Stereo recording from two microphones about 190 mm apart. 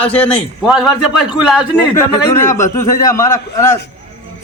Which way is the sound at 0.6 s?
Centre (ahead or behind).